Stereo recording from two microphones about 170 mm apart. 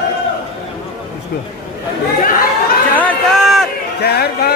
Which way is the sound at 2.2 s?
60° left (ahead or behind).